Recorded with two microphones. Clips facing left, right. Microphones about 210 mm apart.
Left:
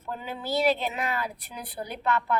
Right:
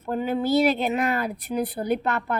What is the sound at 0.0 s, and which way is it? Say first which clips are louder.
A woman's voice: right 11 dB; 50° right (ahead or behind).